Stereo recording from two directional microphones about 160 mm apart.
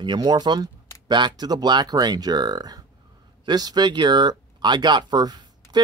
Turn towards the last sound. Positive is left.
turn(degrees=-25)  # may be behind; listen again after turning